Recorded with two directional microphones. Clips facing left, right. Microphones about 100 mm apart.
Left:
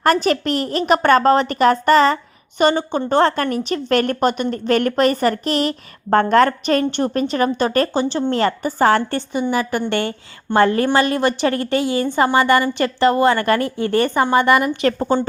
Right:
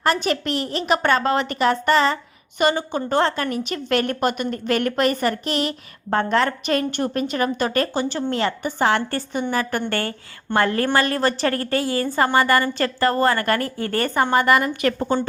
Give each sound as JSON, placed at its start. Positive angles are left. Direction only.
{"t": 0.0, "sound": "a woman's voice", "side_deg": 45}
{"t": 2.6, "sound": "a woman's voice", "side_deg": 30}
{"t": 3.2, "sound": "a woman's voice", "side_deg": 45}
{"t": 8.4, "sound": "a woman's voice", "side_deg": 40}
{"t": 9.3, "sound": "a woman's voice", "side_deg": 10}